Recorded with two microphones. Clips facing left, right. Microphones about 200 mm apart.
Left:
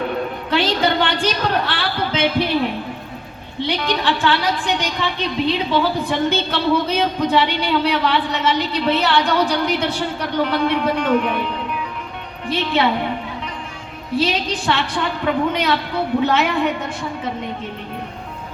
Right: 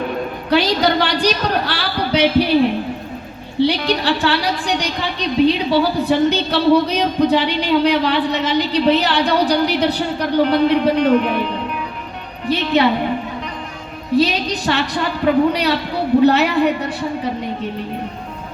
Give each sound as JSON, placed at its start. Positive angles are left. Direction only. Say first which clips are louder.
{"t": 0.5, "sound": "a woman's voice", "louder": "right 3 dB", "side_deg": -40}
{"t": 3.6, "sound": "a woman's voice", "louder": "right 5 dB", "side_deg": -40}
{"t": 12.5, "sound": "a woman's voice", "louder": "right 3 dB", "side_deg": -35}
{"t": 14.2, "sound": "a woman's voice", "louder": "right 3 dB", "side_deg": -40}